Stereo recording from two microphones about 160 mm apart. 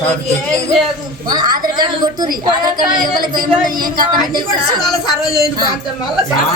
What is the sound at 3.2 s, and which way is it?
Speech, 30° right (ahead or behind).